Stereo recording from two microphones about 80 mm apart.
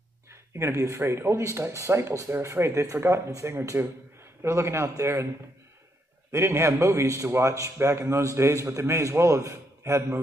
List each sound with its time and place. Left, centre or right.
0.3 s a man's voice: right
6.3 s a man's voice: right